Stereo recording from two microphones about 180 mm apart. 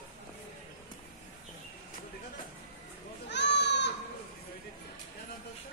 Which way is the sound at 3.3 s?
75° left (ahead or behind).